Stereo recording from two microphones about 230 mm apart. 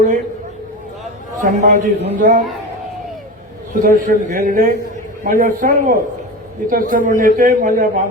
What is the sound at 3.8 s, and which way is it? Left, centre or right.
A man's voice, right.